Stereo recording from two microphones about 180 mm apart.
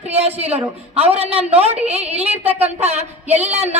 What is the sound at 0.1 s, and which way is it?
A woman's voice, 35° right (ahead or behind).